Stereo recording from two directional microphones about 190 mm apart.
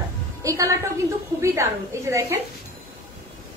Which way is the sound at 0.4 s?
15° right (ahead or behind).